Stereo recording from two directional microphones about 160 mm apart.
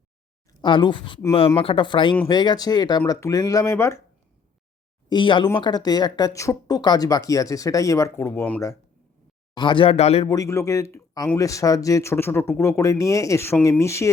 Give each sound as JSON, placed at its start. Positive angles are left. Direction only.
{"t": 0.6, "sound": "speech", "side_deg": 30}
{"t": 5.0, "sound": "speech", "side_deg": 30}
{"t": 9.6, "sound": "speech", "side_deg": 30}
{"t": 10.2, "sound": "speech", "side_deg": 20}